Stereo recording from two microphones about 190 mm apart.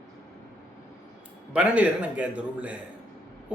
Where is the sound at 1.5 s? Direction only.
5° right (ahead or behind).